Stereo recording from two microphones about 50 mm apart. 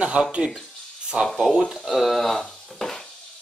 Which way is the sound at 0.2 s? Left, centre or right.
Right.